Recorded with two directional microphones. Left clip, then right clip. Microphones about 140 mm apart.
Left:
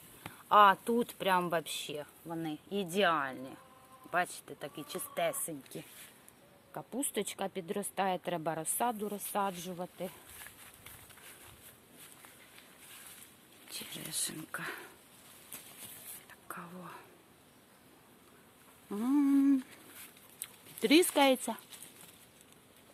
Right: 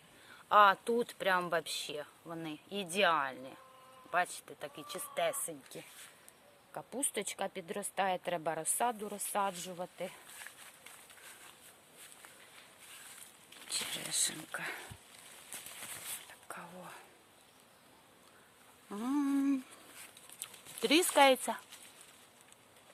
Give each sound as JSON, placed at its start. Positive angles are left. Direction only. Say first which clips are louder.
{"t": 0.4, "sound": "speech", "louder": "left 2 dB", "side_deg": -5}
{"t": 13.7, "sound": "a sound", "louder": "right 5 dB", "side_deg": -30}
{"t": 16.5, "sound": "whispering", "louder": "left 2 dB", "side_deg": -10}
{"t": 18.9, "sound": "speech", "louder": "left 4 dB", "side_deg": -15}
{"t": 20.4, "sound": "speech", "louder": "left 2 dB", "side_deg": -15}